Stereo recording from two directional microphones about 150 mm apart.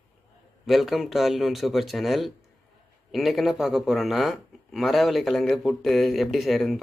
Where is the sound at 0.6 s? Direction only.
Centre (ahead or behind).